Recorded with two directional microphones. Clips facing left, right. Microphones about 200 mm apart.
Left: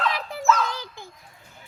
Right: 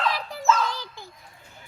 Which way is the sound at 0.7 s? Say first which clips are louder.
Even; 20° left (ahead or behind).